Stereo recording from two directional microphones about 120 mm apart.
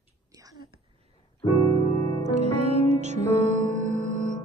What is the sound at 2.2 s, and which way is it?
Music, 65° right (ahead or behind).